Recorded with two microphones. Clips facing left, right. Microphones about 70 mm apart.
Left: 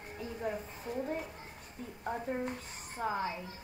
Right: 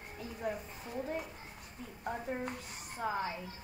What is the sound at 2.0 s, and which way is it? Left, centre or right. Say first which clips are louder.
Speech: left 2 dB; centre.